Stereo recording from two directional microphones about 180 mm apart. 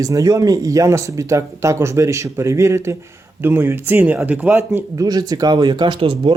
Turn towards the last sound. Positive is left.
turn(degrees=-30)  # may be behind; listen again after turning